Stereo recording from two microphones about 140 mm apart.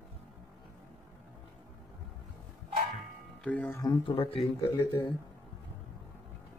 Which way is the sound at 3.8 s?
35° left (ahead or behind).